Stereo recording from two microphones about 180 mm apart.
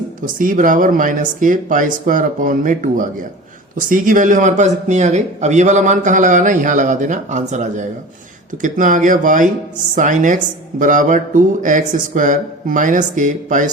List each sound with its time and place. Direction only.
0.2 s speech: 50° right (ahead or behind)